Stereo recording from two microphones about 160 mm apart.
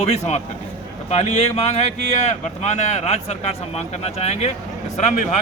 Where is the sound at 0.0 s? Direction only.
45° left (ahead or behind).